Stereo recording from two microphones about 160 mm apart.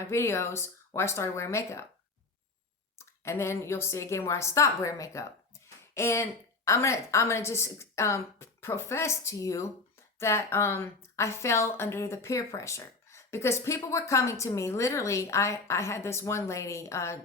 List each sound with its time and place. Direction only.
0.0 s a woman's voice: 15° left (ahead or behind)
3.0 s a woman's voice: 15° left (ahead or behind)